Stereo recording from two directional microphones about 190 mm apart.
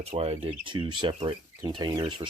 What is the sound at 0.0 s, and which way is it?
Speech, 30° right (ahead or behind).